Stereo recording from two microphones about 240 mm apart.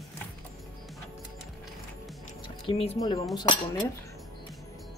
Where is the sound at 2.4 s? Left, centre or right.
Left.